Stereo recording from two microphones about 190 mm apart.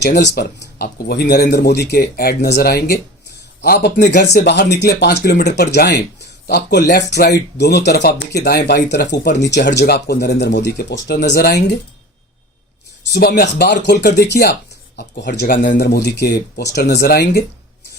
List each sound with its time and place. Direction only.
0.0 s speech: 65° left (ahead or behind)
13.1 s speech: 55° left (ahead or behind)